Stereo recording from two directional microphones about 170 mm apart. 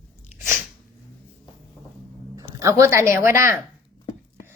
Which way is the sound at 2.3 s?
20° right (ahead or behind).